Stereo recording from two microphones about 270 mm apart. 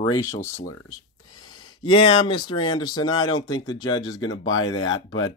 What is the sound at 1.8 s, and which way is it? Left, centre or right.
Speech, centre.